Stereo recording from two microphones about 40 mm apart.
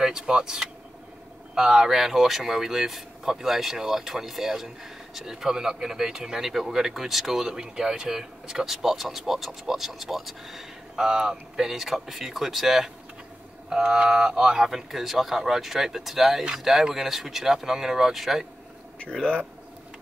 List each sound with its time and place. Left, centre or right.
0.0 s speech: centre
11.1 s speech: centre
13.7 s speech: centre
14.7 s speech: centre